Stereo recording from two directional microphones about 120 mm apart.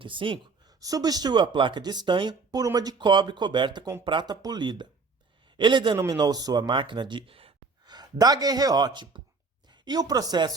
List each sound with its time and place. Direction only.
0.0 s speech: 45° right (ahead or behind)
0.7 s speech: 30° right (ahead or behind); by 7.5 s 50° right (ahead or behind)
7.9 s speech: 35° right (ahead or behind)